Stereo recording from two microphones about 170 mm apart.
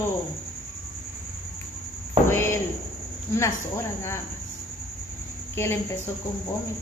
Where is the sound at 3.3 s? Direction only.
15° left (ahead or behind).